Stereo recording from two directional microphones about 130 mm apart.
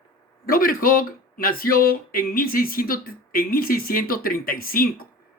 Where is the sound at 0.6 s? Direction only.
90° left.